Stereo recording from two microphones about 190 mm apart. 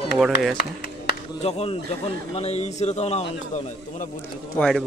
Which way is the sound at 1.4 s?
30° left (ahead or behind).